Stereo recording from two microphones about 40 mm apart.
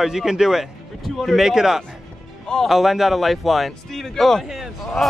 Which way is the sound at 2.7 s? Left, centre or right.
Centre.